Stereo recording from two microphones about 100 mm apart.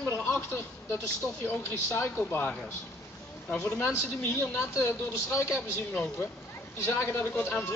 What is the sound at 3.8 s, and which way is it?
A woman's voice, 25° left (ahead or behind).